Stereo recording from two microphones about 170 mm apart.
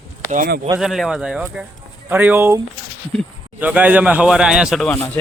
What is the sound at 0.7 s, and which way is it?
A man's voice, centre (ahead or behind).